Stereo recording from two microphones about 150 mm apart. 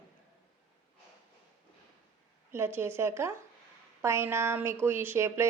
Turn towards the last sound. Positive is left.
turn(degrees=-15)  # may be behind; listen again after turning